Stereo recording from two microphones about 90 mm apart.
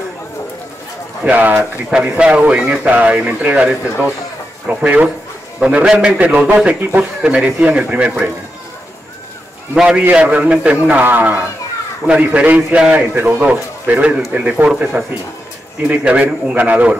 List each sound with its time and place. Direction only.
1.2 s a man's voice: 15° right (ahead or behind)
9.8 s a man's voice: 10° right (ahead or behind)